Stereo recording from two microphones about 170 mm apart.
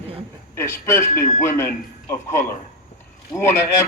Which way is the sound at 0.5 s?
15° left (ahead or behind).